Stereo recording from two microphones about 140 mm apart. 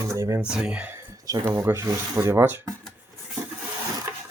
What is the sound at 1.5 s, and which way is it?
Speech, 15° right (ahead or behind).